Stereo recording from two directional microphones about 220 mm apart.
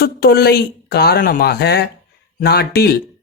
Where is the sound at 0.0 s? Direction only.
45° left (ahead or behind).